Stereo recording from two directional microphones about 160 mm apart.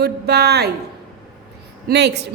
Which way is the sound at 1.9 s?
90° right.